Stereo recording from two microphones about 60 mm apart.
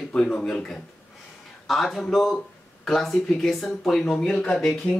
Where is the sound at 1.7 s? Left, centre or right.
Centre.